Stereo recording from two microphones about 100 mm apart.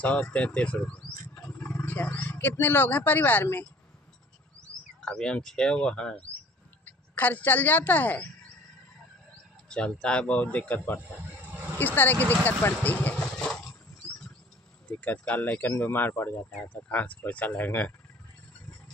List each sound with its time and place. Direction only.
0.0 s speech: 15° left (ahead or behind)
4.6 s speech: 10° left (ahead or behind)
9.7 s speech: 10° left (ahead or behind)
14.9 s speech: 15° left (ahead or behind)